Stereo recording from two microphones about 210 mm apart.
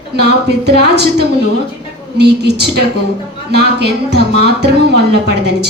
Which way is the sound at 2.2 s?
50° right (ahead or behind).